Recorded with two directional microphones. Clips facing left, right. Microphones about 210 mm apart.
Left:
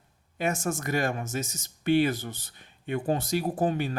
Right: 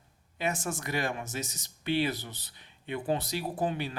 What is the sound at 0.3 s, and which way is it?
Speech, 45° left (ahead or behind).